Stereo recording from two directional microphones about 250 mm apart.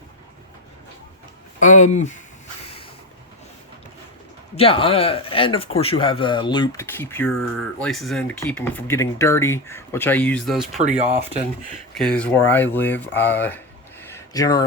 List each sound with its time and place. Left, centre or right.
1.6 s speech: left
4.5 s speech: left; by 10.8 s centre
10.8 s speech: right
11.9 s speech: centre
14.0 s a sound: centre